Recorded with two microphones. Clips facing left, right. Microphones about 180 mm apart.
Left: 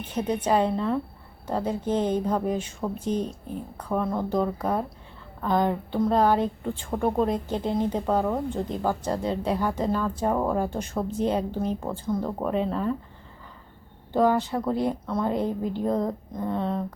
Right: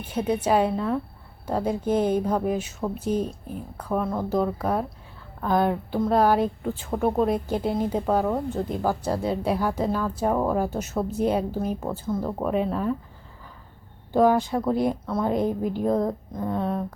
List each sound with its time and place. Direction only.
0.0 s a woman's voice: 10° right (ahead or behind)
14.1 s a woman's voice: 10° right (ahead or behind)